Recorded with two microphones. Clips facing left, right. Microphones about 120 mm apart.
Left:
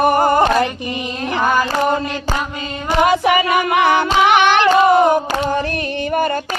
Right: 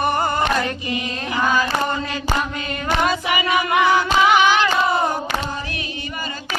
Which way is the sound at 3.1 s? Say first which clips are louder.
Left 6 dB; 50° left (ahead or behind).